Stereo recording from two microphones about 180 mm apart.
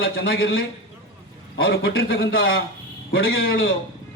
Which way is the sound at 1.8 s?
65° left (ahead or behind).